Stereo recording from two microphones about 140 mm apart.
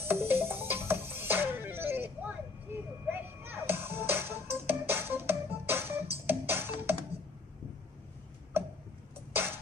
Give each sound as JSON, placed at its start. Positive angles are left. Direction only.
{"t": 0.0, "sound": "music", "side_deg": -15}